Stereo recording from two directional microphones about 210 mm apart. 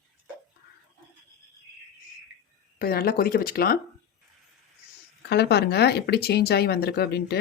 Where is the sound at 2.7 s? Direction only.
45° left (ahead or behind).